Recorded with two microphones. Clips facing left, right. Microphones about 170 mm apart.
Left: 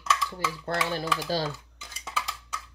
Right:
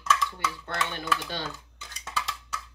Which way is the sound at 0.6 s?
35° left (ahead or behind).